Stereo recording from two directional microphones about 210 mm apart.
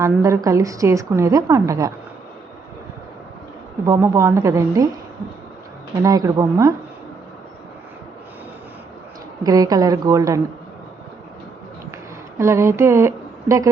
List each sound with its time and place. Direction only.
0.0 s a woman's voice: 15° right (ahead or behind)
3.8 s a woman's voice: 15° right (ahead or behind)
6.0 s a woman's voice: 15° right (ahead or behind)
9.4 s a woman's voice: 15° right (ahead or behind)
12.4 s speech: 15° right (ahead or behind)